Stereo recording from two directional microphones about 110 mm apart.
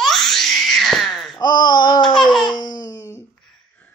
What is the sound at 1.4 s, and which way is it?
Babbling, 40° left (ahead or behind).